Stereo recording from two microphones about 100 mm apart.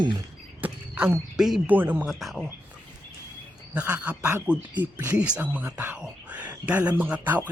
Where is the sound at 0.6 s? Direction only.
15° right (ahead or behind).